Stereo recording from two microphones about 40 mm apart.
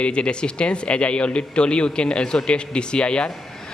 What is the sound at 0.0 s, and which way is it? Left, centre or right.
A man's voice, left.